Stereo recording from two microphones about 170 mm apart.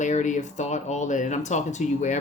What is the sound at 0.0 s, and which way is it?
Speech, 45° left (ahead or behind).